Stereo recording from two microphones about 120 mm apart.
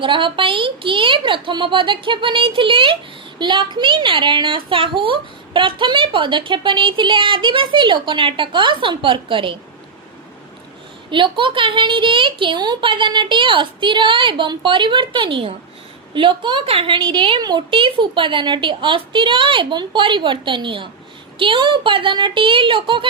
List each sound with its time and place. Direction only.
0.0 s a woman's voice: 45° right (ahead or behind)
11.1 s a woman's voice: 45° right (ahead or behind)